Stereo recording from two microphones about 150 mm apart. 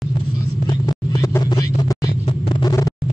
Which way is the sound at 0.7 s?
25° left (ahead or behind).